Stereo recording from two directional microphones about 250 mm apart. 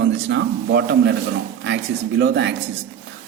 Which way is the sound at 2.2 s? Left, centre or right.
Right.